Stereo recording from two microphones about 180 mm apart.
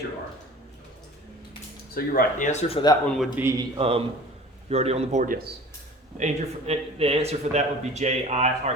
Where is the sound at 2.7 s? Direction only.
25° left (ahead or behind).